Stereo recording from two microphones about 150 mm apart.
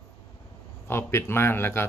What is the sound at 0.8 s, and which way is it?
A man's voice, 15° left (ahead or behind).